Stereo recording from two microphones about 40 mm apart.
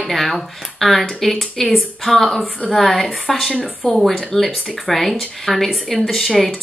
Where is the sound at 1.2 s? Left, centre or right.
Centre.